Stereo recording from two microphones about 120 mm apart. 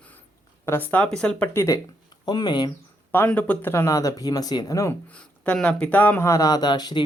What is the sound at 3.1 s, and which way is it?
Speech, 15° left (ahead or behind).